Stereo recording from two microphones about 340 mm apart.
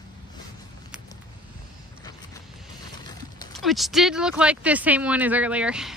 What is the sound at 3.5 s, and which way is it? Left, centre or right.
Speech, centre.